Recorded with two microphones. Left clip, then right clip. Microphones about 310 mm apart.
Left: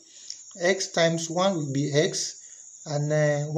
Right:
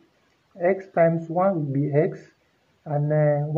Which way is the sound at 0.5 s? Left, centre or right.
Right.